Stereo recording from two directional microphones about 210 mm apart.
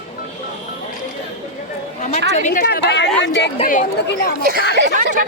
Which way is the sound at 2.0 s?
35° left (ahead or behind).